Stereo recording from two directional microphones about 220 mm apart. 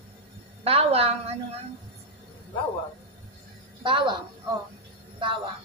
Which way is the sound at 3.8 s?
20° right (ahead or behind).